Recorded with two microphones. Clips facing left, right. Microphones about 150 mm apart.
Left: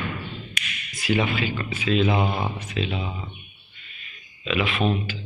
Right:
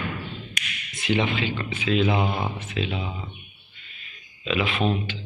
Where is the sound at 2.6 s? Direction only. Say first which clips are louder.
Left 1 dB; 20° right (ahead or behind).